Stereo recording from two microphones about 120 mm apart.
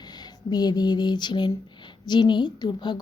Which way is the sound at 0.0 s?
35° left (ahead or behind).